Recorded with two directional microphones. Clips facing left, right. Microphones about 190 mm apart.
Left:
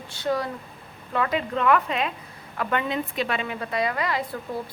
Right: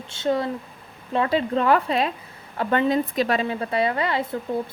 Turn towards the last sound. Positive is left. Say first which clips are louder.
# right 3 dB
turn(degrees=-25)  # may be behind; listen again after turning